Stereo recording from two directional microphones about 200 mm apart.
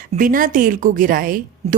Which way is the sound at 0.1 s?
45° right (ahead or behind).